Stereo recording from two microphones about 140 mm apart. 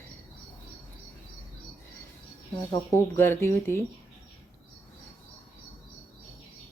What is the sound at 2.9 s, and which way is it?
Speech, 15° left (ahead or behind).